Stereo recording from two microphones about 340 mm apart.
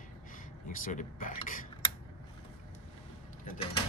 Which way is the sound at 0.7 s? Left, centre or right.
Left.